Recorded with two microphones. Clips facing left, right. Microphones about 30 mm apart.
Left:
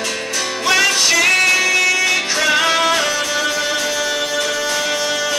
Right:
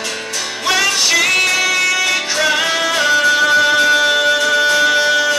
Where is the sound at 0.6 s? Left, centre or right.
Centre.